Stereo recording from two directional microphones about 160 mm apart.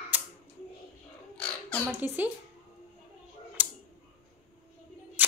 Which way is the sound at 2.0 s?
10° right (ahead or behind).